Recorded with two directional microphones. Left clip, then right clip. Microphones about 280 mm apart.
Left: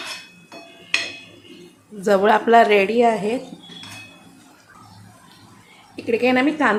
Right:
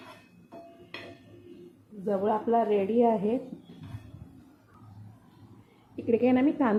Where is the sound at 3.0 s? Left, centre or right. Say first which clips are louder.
Left 7 dB; centre.